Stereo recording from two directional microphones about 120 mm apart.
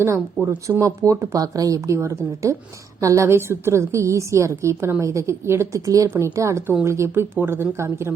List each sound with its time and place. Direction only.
0.4 s a woman's voice: 25° right (ahead or behind)